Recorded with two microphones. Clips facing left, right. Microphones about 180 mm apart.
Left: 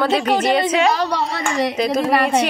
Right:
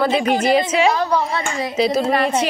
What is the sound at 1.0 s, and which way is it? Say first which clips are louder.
Speech: right 2 dB; 80° left.